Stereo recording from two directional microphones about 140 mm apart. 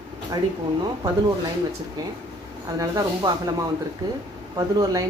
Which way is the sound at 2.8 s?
30° right (ahead or behind).